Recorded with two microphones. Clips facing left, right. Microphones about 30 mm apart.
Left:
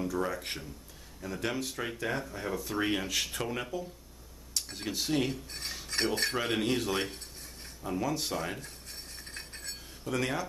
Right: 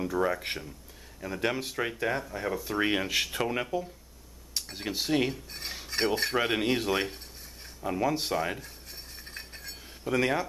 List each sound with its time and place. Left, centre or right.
0.0 s speech: right
5.3 s cutlery: centre
6.3 s speech: centre
9.2 s a sound: centre
10.0 s speech: centre